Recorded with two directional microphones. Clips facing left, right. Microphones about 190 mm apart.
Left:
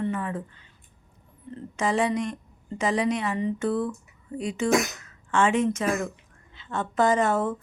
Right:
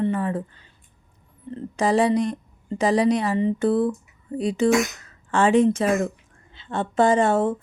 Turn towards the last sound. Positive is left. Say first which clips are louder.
# right 4 dB
turn(degrees=-30)  # may be behind; listen again after turning